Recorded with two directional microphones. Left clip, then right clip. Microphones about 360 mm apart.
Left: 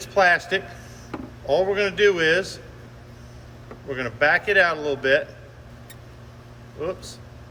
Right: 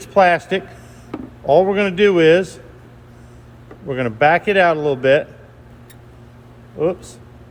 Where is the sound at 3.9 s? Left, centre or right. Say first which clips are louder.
Right 6 dB; centre.